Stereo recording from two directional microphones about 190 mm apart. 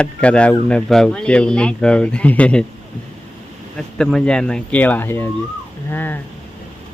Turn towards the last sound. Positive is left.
turn(degrees=10)  # may be behind; listen again after turning